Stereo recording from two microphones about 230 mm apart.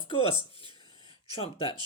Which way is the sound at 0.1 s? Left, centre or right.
Left.